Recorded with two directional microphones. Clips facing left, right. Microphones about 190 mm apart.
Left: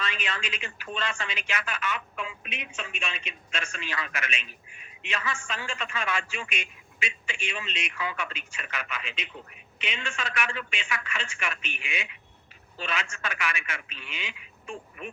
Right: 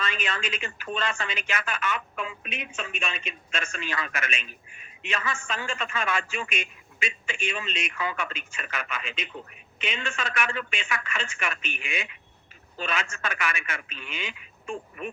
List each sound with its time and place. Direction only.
0.0 s speech: 45° right (ahead or behind)